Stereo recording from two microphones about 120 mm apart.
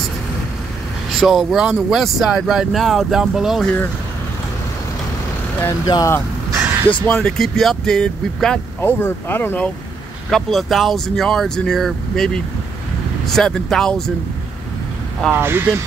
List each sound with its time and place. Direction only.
1.2 s speech: centre (ahead or behind)
3.6 s speech: 15° left (ahead or behind)
5.9 s speech: 35° left (ahead or behind)
6.5 s a sound: 20° right (ahead or behind)
7.1 s speech: 5° left (ahead or behind)
8.8 s speech: 20° left (ahead or behind)
10.3 s speech: centre (ahead or behind)
13.3 s speech: 5° left (ahead or behind)
15.3 s speech: 20° right (ahead or behind)